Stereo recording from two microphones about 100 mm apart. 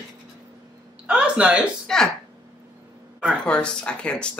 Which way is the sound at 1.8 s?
5° left (ahead or behind).